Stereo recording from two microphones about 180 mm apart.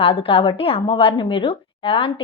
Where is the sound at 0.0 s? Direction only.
30° left (ahead or behind).